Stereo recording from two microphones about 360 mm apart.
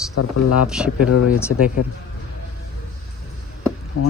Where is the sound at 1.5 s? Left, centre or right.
Left.